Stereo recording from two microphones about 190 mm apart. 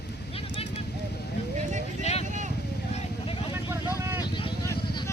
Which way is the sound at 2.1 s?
35° left (ahead or behind).